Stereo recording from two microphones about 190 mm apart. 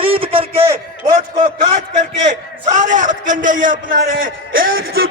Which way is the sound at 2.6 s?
40° right (ahead or behind).